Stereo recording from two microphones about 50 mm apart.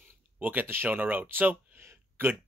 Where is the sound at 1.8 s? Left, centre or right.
Right.